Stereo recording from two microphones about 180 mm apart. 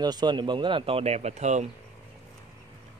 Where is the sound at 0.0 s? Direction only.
25° right (ahead or behind); by 1.7 s 40° right (ahead or behind).